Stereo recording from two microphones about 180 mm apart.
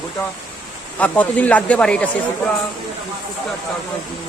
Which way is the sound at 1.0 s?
10° left (ahead or behind).